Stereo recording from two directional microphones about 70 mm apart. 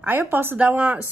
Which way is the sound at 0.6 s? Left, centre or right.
Right.